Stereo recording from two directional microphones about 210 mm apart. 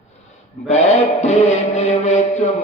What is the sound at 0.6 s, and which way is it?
Mantra, 35° left (ahead or behind).